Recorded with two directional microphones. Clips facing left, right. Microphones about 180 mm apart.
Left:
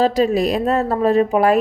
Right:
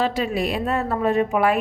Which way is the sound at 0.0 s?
40° left (ahead or behind).